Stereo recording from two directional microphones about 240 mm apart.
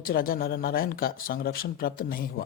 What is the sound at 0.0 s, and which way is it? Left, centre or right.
Speech, left.